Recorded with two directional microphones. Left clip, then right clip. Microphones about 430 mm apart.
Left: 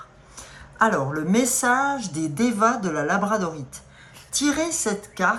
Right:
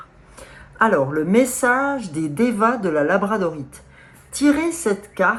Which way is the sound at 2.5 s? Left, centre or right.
Right.